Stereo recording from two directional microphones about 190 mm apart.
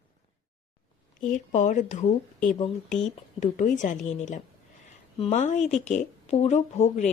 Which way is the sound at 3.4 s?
40° left (ahead or behind).